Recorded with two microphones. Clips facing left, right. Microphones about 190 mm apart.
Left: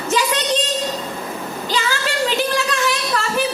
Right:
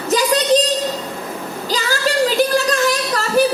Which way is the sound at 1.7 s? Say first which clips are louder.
Right 4 dB; 40° right (ahead or behind).